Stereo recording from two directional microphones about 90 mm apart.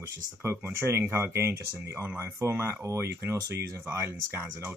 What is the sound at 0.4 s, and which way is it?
Speech, 25° right (ahead or behind).